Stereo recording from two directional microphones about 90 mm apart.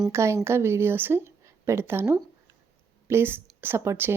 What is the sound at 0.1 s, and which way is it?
Speech, 30° right (ahead or behind).